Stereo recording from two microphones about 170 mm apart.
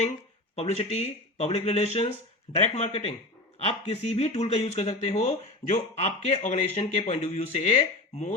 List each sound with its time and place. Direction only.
0.5 s speech: 35° left (ahead or behind)